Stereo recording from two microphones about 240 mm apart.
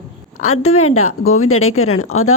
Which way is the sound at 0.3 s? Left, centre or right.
Left.